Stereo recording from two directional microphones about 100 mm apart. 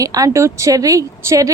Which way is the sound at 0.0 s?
35° right (ahead or behind).